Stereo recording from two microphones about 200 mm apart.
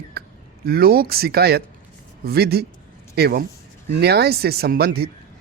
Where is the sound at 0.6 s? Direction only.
50° right (ahead or behind).